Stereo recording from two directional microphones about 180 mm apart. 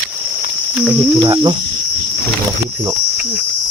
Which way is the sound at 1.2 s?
25° right (ahead or behind).